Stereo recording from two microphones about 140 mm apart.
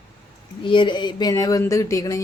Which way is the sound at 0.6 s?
35° left (ahead or behind).